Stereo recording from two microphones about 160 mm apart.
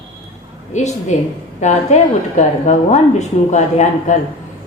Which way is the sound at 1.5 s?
45° left (ahead or behind).